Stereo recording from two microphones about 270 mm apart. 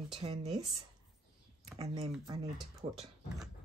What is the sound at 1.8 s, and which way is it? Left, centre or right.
Speech, centre.